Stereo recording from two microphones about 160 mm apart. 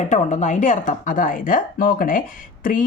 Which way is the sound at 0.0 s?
50° left (ahead or behind).